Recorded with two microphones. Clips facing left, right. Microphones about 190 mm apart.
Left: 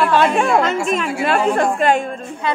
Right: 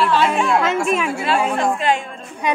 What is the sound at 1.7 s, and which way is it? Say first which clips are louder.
Speech: left 4 dB; 50° left (ahead or behind).